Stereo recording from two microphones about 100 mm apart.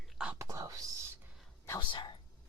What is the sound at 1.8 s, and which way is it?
Speech, 55° left (ahead or behind).